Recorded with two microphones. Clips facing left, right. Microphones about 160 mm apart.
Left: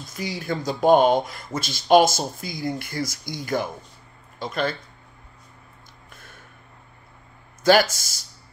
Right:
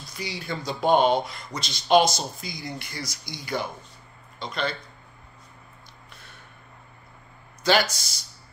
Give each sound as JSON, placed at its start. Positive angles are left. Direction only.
{"t": 0.0, "sound": "speech", "side_deg": 45}
{"t": 7.6, "sound": "speech", "side_deg": 50}